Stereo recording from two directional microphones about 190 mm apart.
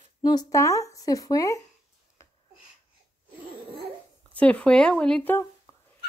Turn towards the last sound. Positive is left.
turn(degrees=10)  # may be behind; listen again after turning